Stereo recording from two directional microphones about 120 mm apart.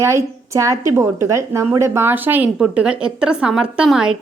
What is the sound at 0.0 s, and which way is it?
A woman's voice, 25° right (ahead or behind).